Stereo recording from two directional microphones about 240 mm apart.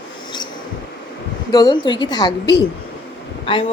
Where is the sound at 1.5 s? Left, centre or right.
Centre.